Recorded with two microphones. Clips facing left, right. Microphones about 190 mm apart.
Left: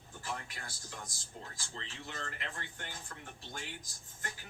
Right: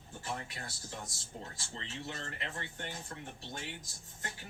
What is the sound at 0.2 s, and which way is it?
A man's voice, 25° right (ahead or behind).